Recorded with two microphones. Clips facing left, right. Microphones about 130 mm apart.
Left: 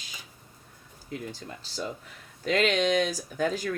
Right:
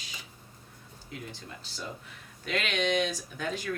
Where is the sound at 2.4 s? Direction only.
40° left (ahead or behind).